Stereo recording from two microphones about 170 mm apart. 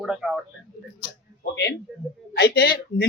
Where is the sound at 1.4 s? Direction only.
80° left.